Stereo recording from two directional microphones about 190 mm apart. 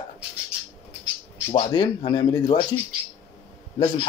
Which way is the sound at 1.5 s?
25° left (ahead or behind).